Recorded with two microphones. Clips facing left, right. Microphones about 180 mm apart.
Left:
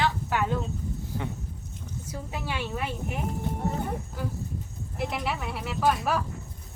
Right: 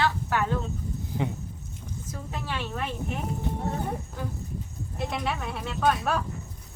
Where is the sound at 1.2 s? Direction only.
15° right (ahead or behind).